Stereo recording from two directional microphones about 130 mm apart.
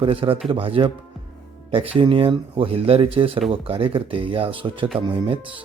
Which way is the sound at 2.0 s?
40° right (ahead or behind).